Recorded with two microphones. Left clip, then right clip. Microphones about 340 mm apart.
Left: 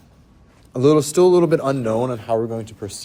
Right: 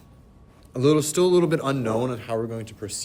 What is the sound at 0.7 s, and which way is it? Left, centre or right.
A man's voice, centre.